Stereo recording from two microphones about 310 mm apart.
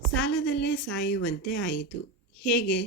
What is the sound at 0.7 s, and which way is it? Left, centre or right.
Speech, centre.